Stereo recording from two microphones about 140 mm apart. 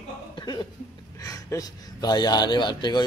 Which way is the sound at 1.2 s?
25° left (ahead or behind).